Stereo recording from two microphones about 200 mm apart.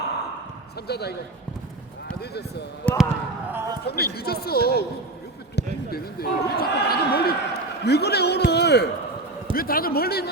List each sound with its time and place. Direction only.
0.9 s a man's voice: 55° left (ahead or behind)
2.8 s speech: 5° left (ahead or behind)
3.5 s speech: 15° right (ahead or behind)
3.8 s a man's voice: 50° left (ahead or behind)